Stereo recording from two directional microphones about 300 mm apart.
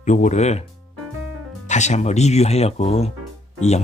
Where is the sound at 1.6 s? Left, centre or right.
Left.